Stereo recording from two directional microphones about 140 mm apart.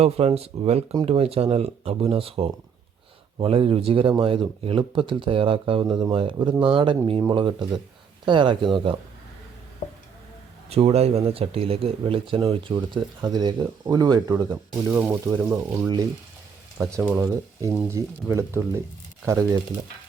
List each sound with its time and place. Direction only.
0.0 s speech: 45° right (ahead or behind)
10.7 s speech: 45° right (ahead or behind); by 14.4 s 25° right (ahead or behind)
14.5 s speech: 10° right (ahead or behind)
17.1 s speech: 20° right (ahead or behind)